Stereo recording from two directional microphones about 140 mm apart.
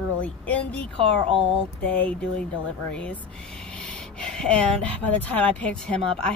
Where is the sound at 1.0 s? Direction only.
40° right (ahead or behind).